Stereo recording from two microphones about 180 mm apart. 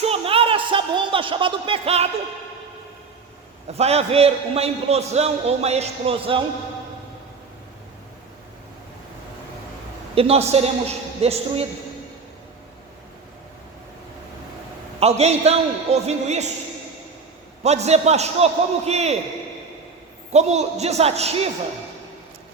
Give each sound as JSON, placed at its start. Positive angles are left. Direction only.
{"t": 0.0, "sound": "a sound", "side_deg": -35}
{"t": 3.7, "sound": "a man's voice", "side_deg": -35}
{"t": 10.2, "sound": "a man's voice", "side_deg": -35}
{"t": 15.0, "sound": "a man's voice", "side_deg": -35}
{"t": 17.6, "sound": "a man's voice", "side_deg": -35}
{"t": 20.3, "sound": "a man's voice", "side_deg": -40}